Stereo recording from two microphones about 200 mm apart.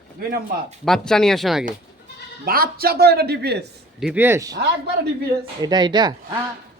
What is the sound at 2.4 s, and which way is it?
Speech, 50° right (ahead or behind).